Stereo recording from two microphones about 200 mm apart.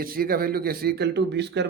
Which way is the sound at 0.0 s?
45° right (ahead or behind).